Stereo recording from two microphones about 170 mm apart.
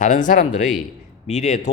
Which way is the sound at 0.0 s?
50° left (ahead or behind).